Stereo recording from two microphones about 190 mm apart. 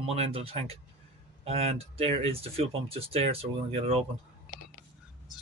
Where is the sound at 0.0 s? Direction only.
30° right (ahead or behind).